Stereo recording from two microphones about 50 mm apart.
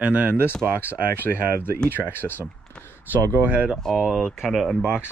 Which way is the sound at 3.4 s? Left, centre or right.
Right.